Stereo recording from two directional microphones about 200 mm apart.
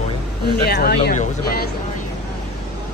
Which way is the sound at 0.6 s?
55° left (ahead or behind).